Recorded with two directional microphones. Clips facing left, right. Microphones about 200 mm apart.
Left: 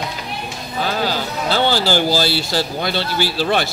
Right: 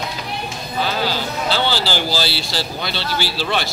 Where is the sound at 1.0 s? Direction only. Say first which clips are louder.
Left 1 dB; 50° left (ahead or behind).